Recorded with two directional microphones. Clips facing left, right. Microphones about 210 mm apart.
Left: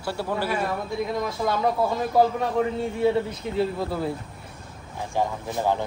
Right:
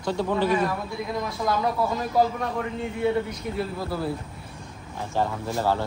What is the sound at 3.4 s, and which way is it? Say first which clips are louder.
Speech: left 2 dB; 25° left (ahead or behind).